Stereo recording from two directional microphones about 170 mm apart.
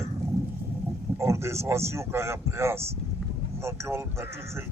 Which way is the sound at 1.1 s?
15° right (ahead or behind).